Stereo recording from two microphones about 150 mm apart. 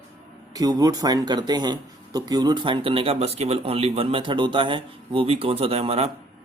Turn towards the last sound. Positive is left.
turn(degrees=-40)  # may be behind; listen again after turning